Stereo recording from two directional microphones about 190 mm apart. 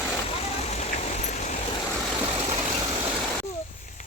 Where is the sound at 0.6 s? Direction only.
35° left (ahead or behind).